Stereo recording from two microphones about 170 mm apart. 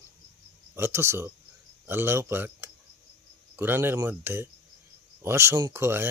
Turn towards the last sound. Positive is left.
turn(degrees=-15)  # may be behind; listen again after turning